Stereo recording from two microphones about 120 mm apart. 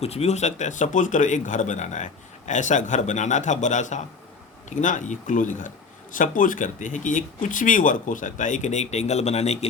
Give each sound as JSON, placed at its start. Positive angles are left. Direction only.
{"t": 0.0, "sound": "speech", "side_deg": 60}